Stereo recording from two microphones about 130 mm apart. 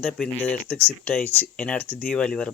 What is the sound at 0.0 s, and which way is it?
Speech, 10° left (ahead or behind).